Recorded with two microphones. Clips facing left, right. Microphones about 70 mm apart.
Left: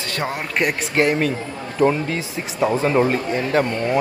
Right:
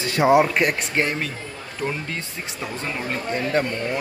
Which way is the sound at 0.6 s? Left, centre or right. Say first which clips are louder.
Left 2 dB; centre.